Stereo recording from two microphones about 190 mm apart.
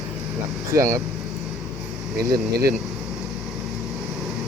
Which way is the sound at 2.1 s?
55° right (ahead or behind).